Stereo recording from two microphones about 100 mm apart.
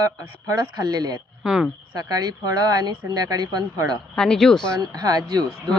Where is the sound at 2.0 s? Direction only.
40° right (ahead or behind).